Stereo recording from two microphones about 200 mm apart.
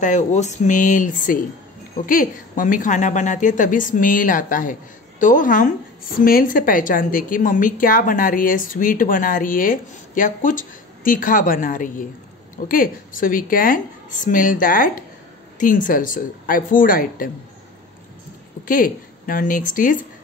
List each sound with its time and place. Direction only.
0.0 s a woman's voice: 35° left (ahead or behind)
18.7 s a woman's voice: 45° left (ahead or behind)